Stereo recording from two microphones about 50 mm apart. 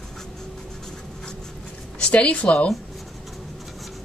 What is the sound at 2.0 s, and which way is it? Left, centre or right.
Speech, left.